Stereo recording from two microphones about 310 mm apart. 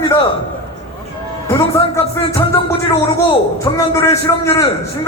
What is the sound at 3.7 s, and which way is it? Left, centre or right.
Speech, centre.